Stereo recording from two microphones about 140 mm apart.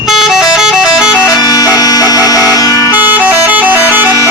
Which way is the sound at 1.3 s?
30° left (ahead or behind).